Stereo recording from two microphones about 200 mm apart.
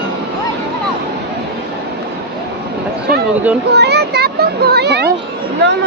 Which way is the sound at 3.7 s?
55° right (ahead or behind).